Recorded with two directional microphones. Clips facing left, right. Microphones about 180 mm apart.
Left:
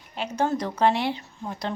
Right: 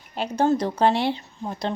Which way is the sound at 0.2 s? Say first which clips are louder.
Right 4 dB; 30° right (ahead or behind).